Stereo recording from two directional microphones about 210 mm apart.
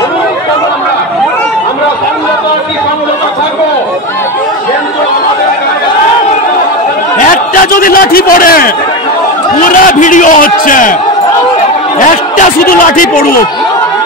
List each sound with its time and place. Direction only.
7.2 s a sound: 40° left (ahead or behind)
9.6 s a man's voice: 40° left (ahead or behind)
12.0 s a man's voice: 40° left (ahead or behind)